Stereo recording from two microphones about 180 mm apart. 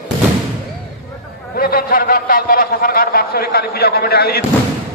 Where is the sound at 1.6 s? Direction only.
55° left (ahead or behind).